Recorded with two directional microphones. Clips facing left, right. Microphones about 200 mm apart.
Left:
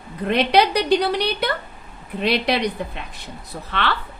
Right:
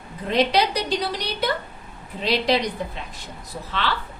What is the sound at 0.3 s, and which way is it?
A woman's voice, 60° left (ahead or behind).